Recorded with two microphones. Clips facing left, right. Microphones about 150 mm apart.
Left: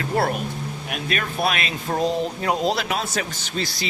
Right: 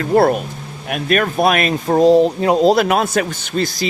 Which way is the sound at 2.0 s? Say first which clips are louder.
Right 13 dB; 35° right (ahead or behind).